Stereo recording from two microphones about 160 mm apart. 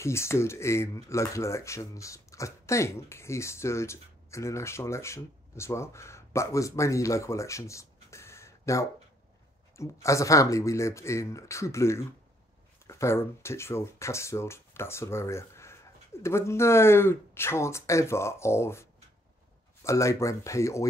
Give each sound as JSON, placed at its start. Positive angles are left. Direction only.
{"t": 0.0, "sound": "speech", "side_deg": 15}